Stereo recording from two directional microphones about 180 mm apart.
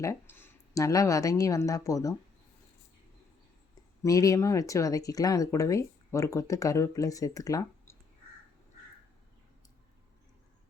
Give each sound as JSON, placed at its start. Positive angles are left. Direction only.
{"t": 0.0, "sound": "speech", "side_deg": 15}
{"t": 4.0, "sound": "speech", "side_deg": 20}